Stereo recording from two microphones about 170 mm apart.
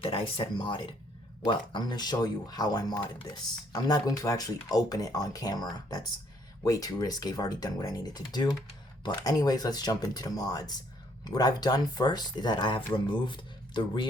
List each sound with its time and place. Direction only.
0.0 s speech: 30° left (ahead or behind)